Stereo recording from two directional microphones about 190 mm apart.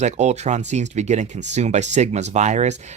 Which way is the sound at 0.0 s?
35° right (ahead or behind).